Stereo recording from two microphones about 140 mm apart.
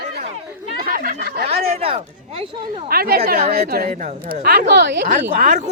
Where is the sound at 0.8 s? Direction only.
90° right.